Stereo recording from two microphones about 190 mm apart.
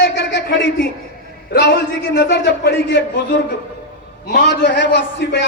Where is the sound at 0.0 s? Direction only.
65° left (ahead or behind).